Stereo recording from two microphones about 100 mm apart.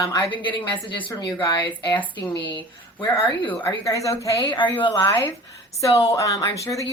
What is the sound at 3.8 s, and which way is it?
Speech, 35° left (ahead or behind).